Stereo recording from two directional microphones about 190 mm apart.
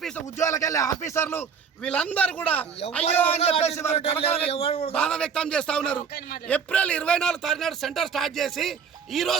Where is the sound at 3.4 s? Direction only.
35° left (ahead or behind).